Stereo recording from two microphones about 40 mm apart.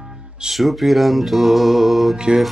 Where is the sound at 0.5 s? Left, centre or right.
Centre.